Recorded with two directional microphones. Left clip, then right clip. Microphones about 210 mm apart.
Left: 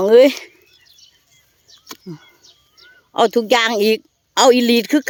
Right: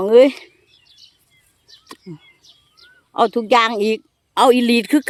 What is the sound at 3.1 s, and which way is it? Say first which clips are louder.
Speech: left 1 dB; 15° left (ahead or behind).